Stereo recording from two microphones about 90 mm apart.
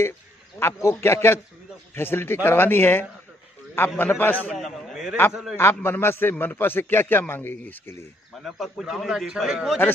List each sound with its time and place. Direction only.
0.8 s a man's voice: 30° left (ahead or behind)
4.6 s a man's voice: centre (ahead or behind)
5.6 s a man's voice: 25° left (ahead or behind)
8.5 s a man's voice: centre (ahead or behind)